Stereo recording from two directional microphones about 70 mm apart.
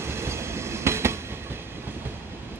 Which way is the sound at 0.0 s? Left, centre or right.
Right.